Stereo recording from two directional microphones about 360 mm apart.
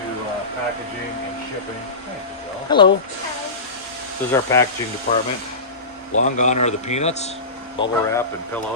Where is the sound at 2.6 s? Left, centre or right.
Centre.